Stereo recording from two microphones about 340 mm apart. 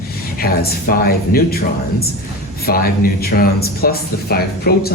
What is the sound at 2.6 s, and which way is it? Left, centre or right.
Speech, left.